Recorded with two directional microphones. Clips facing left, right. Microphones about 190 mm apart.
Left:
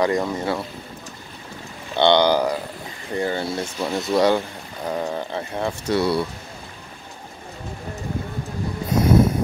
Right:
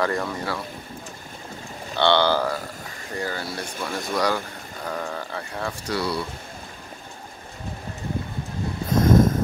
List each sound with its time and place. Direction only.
0.0 s speech: 20° left (ahead or behind)
2.0 s speech: 20° left (ahead or behind)
8.9 s a sound: 10° left (ahead or behind)